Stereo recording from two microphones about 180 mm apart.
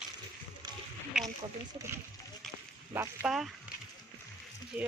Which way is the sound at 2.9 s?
10° right (ahead or behind).